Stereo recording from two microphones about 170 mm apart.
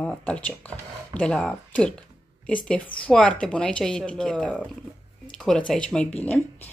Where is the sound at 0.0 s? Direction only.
10° left (ahead or behind).